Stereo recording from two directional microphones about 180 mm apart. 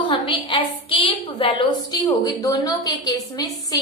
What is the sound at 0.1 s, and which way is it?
A woman's voice, 25° left (ahead or behind).